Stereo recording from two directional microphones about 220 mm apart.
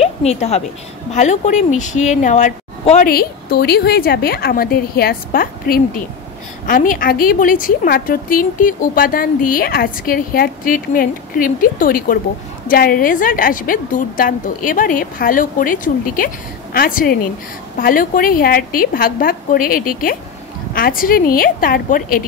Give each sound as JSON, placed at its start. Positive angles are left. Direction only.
{"t": 0.0, "sound": "a woman's voice", "side_deg": 30}
{"t": 3.1, "sound": "a woman's voice", "side_deg": 45}